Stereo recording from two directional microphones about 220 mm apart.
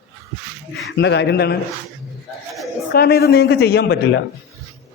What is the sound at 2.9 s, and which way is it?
A man's voice, 45° left (ahead or behind).